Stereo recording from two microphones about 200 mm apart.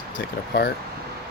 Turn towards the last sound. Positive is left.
turn(degrees=50)  # may be behind; listen again after turning